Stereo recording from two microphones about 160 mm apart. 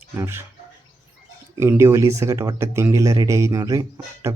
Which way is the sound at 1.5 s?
15° right (ahead or behind).